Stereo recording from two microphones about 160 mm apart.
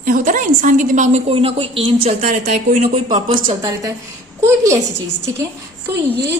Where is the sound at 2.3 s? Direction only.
45° right (ahead or behind).